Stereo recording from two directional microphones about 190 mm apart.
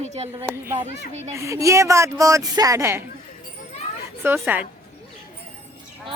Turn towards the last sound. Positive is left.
turn(degrees=-10)  # may be behind; listen again after turning